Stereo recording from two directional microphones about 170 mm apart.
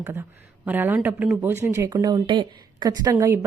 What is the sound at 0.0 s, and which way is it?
A woman's voice, 15° right (ahead or behind).